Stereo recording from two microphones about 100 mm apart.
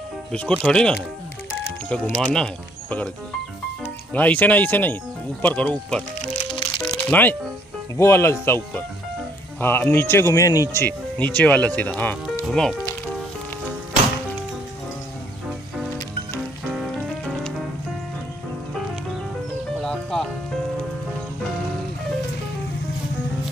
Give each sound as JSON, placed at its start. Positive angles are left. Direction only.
{"t": 0.3, "sound": "speech", "side_deg": 10}
{"t": 2.0, "sound": "speech", "side_deg": 15}
{"t": 4.1, "sound": "speech", "side_deg": 15}
{"t": 6.5, "sound": "music", "side_deg": 45}
{"t": 7.1, "sound": "speech", "side_deg": 20}
{"t": 10.7, "sound": "speech", "side_deg": 20}
{"t": 19.8, "sound": "music", "side_deg": 5}